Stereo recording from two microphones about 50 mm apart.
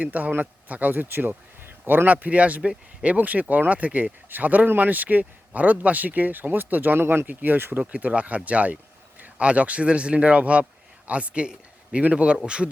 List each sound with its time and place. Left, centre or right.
0.0 s speech: right
7.8 s speech: right